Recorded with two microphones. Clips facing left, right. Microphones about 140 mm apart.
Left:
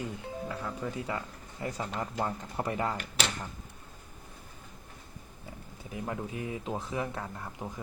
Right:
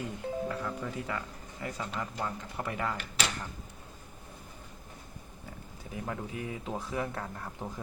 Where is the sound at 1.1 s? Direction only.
25° left (ahead or behind).